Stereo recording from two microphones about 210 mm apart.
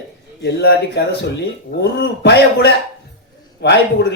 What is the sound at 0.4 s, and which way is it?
A man's voice, 55° left (ahead or behind).